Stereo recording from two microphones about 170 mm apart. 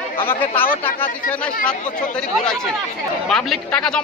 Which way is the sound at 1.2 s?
10° left (ahead or behind).